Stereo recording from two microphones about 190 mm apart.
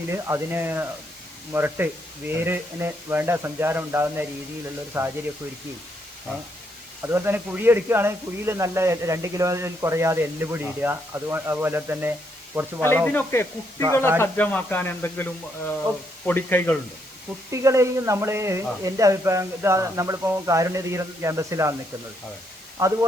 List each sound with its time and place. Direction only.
0.1 s a man's voice: 15° right (ahead or behind)
7.1 s a man's voice: 10° right (ahead or behind)
13.1 s speech: 10° left (ahead or behind)
17.5 s a man's voice: 15° right (ahead or behind)
22.8 s a man's voice: 15° right (ahead or behind)